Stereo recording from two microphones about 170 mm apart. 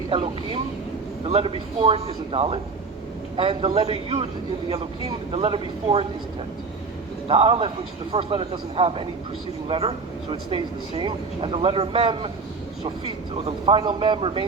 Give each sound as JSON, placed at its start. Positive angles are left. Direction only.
{"t": 0.1, "sound": "speech", "side_deg": -30}
{"t": 5.3, "sound": "speech", "side_deg": -30}
{"t": 7.3, "sound": "speech", "side_deg": -35}